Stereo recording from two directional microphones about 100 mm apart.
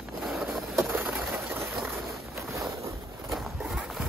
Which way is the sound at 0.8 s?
20° right (ahead or behind).